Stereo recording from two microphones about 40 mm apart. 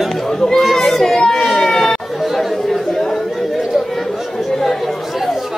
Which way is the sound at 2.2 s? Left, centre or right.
Centre.